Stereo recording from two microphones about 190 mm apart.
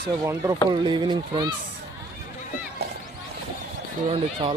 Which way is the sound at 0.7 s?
25° right (ahead or behind).